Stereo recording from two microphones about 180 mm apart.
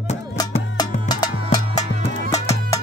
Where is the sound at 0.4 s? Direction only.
20° left (ahead or behind).